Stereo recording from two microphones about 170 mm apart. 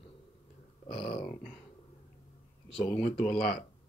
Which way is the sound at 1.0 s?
35° left (ahead or behind).